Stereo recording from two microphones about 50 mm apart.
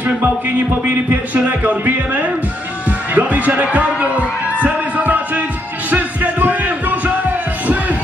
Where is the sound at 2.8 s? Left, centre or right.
Right.